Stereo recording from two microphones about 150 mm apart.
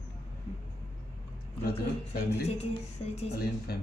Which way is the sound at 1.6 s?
90° left.